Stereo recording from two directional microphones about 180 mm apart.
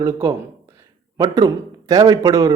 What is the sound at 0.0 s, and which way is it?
Speech, 15° right (ahead or behind).